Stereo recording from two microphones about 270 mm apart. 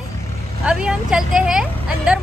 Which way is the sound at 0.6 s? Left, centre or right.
Centre.